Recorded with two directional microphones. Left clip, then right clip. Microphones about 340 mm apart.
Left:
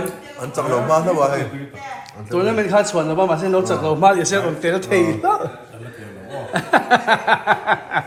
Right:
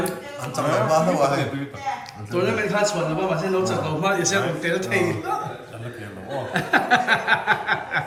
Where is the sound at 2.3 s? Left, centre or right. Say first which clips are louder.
Left 6 dB; centre.